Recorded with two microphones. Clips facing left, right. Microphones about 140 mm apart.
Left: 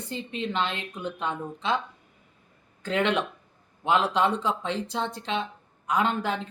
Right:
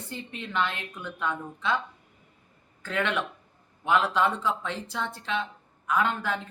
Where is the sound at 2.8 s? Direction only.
20° left (ahead or behind).